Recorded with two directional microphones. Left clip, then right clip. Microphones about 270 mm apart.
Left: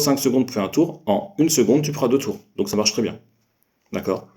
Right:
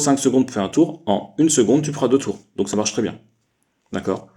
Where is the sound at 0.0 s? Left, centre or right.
Right.